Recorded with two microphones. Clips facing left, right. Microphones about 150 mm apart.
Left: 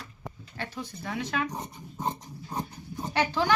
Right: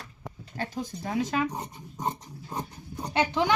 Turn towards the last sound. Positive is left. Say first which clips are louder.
# right 1 dB
turn(degrees=-20)  # may be behind; listen again after turning